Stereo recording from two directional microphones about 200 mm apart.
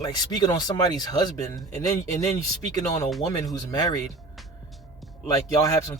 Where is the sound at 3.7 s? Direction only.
20° left (ahead or behind).